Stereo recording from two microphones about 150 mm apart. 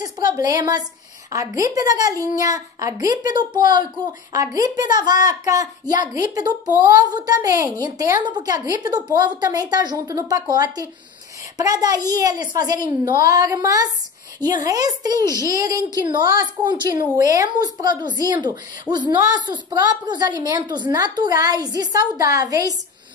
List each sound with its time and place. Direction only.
0.0 s a woman's voice: 25° right (ahead or behind)